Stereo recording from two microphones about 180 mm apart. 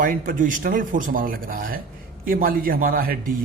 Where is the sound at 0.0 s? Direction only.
50° right (ahead or behind).